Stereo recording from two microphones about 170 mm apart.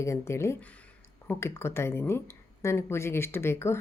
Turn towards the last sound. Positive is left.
turn(degrees=15)  # may be behind; listen again after turning